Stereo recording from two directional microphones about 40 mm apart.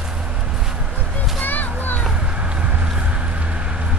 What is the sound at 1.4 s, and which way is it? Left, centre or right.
Children playing, left.